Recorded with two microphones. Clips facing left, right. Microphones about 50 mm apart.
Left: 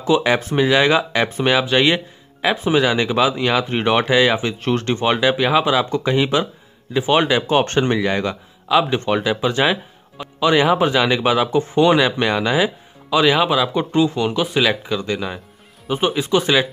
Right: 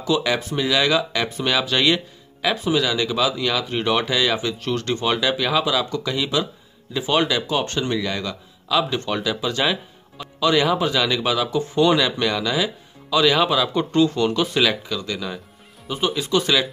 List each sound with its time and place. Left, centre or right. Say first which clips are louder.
0.0 s speech: left 5 dB; left